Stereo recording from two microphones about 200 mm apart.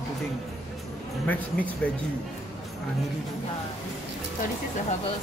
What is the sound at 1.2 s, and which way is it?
Speech, 10° left (ahead or behind).